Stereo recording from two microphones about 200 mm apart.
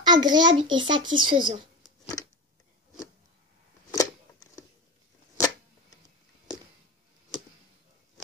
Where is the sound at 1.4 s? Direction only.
25° right (ahead or behind).